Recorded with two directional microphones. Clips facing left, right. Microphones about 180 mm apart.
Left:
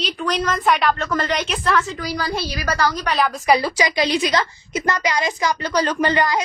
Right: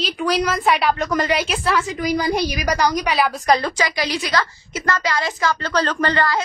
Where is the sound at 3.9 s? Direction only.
20° left (ahead or behind).